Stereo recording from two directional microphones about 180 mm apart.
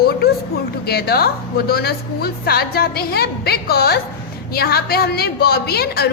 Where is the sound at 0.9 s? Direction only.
60° left (ahead or behind).